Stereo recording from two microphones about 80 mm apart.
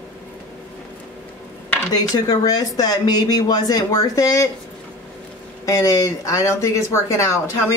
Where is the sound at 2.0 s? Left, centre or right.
Left.